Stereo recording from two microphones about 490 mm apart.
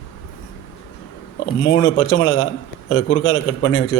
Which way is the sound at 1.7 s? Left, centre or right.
Left.